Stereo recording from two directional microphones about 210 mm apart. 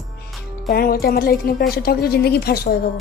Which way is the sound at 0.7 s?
45° left (ahead or behind).